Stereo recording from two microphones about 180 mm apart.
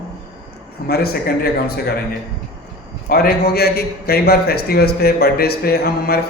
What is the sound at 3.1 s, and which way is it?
A man's voice, 60° left (ahead or behind).